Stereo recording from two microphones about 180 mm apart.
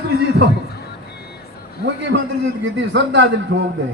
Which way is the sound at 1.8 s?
80° right.